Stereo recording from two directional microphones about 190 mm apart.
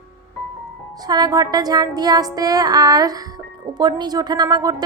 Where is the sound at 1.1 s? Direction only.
20° right (ahead or behind).